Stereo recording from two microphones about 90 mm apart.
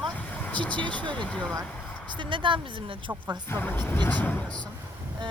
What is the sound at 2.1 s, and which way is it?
Speech, 65° right (ahead or behind).